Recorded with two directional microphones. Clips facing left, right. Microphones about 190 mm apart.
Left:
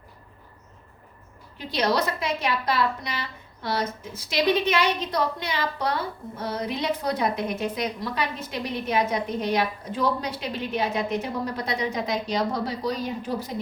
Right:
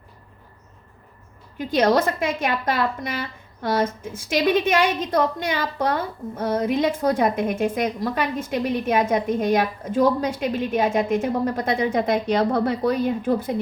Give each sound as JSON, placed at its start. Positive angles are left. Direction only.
{"t": 1.5, "sound": "a woman's voice", "side_deg": -50}